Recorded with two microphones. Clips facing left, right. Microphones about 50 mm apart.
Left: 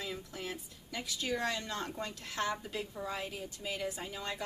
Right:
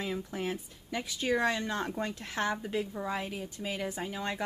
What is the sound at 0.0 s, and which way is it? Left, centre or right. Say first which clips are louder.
Speech: right 7 dB; right.